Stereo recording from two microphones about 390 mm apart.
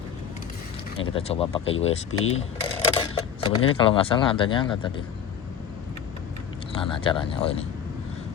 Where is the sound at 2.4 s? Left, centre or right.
Centre.